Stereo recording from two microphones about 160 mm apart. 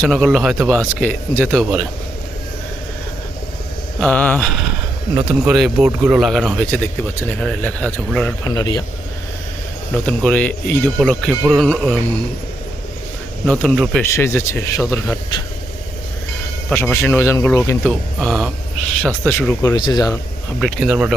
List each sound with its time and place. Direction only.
0.0 s speech: centre (ahead or behind)
4.0 s speech: 10° left (ahead or behind)
5.5 s speech: 5° right (ahead or behind)
8.4 s speech: 25° left (ahead or behind)
10.1 s speech: 10° left (ahead or behind)
13.4 s speech: centre (ahead or behind)
14.0 s speech: 15° left (ahead or behind)
16.6 s speech: 15° left (ahead or behind)
17.8 s speech: centre (ahead or behind)
19.6 s speech: 25° left (ahead or behind)
20.6 s speech: centre (ahead or behind)